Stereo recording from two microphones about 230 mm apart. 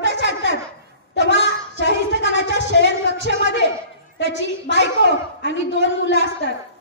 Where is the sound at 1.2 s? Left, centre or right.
Left.